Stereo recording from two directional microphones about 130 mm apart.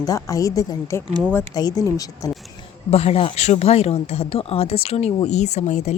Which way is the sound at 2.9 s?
50° left (ahead or behind).